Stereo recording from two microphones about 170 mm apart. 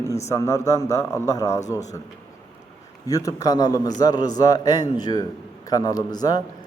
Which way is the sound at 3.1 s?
20° left (ahead or behind).